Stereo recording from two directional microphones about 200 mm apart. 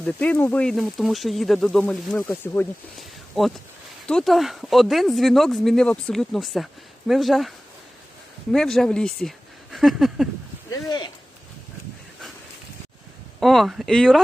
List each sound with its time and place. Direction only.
0.0 s speech: 5° left (ahead or behind)
3.0 s a sound: centre (ahead or behind)
4.0 s speech: centre (ahead or behind)
8.5 s speech: centre (ahead or behind)
10.7 s speech: 20° left (ahead or behind)
13.4 s speech: centre (ahead or behind)